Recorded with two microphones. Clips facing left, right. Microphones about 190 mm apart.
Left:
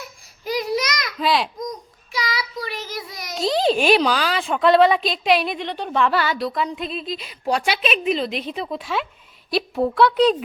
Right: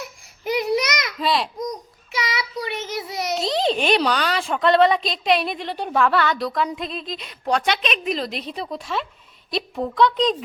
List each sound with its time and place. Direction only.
1.2 s babbling: centre (ahead or behind)
2.1 s child singing: 25° right (ahead or behind)
3.3 s a child's voice: centre (ahead or behind)